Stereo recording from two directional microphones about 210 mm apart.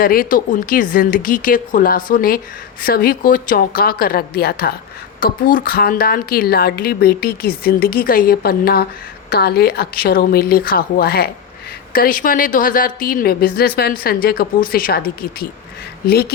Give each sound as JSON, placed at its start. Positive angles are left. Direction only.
{"t": 0.0, "sound": "a woman's voice", "side_deg": 40}